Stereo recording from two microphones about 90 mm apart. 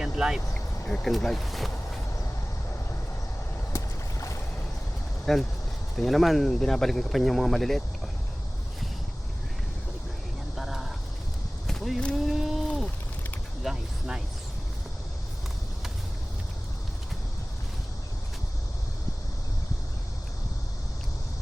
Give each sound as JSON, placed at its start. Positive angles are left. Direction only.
{"t": 0.0, "sound": "vehicle", "side_deg": -5}
{"t": 0.5, "sound": "speech", "side_deg": 10}
{"t": 3.7, "sound": "boat", "side_deg": 35}
{"t": 5.2, "sound": "speech", "side_deg": 5}
{"t": 10.6, "sound": "a sound", "side_deg": -5}